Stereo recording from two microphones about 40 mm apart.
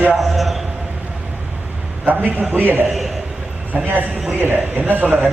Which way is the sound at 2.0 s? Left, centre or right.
Right.